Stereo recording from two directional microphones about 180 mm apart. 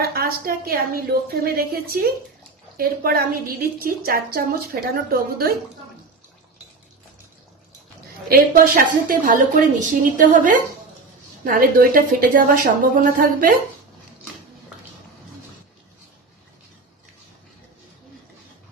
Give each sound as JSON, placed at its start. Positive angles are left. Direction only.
{"t": 0.1, "sound": "a woman's voice", "side_deg": -55}
{"t": 8.3, "sound": "a woman's voice", "side_deg": -50}